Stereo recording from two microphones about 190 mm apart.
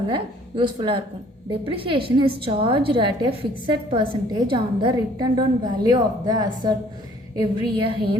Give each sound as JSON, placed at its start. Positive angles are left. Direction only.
{"t": 0.1, "sound": "a woman's voice", "side_deg": -25}